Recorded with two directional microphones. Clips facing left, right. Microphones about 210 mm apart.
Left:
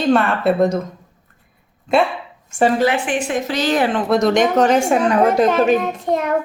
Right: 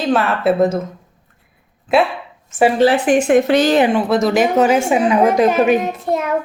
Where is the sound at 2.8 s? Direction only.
35° right (ahead or behind); by 3.6 s 60° right (ahead or behind).